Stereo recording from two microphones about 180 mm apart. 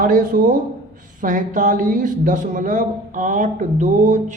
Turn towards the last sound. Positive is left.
turn(degrees=-45)  # may be behind; listen again after turning